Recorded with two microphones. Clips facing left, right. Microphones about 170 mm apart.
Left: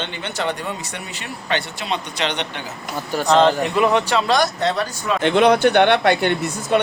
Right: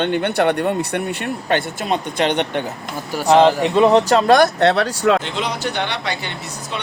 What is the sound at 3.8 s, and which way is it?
Speech, 40° right (ahead or behind).